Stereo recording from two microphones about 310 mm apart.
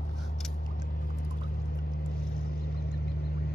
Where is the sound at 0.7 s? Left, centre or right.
Left.